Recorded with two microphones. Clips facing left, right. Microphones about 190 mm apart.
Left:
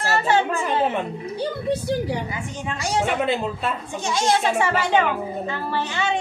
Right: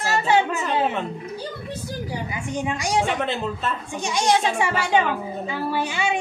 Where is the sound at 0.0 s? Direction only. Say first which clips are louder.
Even; 15° right (ahead or behind).